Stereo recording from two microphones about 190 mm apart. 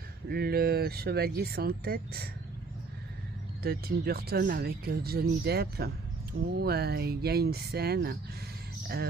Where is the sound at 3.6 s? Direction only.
55° right (ahead or behind).